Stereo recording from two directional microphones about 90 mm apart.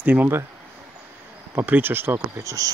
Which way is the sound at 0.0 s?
20° right (ahead or behind).